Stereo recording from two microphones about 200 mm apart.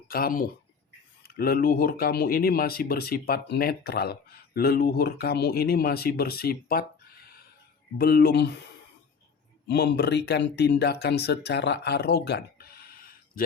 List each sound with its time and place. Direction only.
0.1 s speech: 45° left (ahead or behind)
9.6 s speech: 55° left (ahead or behind)